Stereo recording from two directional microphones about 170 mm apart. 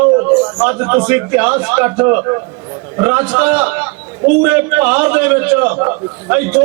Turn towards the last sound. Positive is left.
turn(degrees=-10)  # may be behind; listen again after turning